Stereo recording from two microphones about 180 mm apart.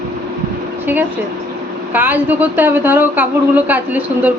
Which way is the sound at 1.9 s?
10° right (ahead or behind).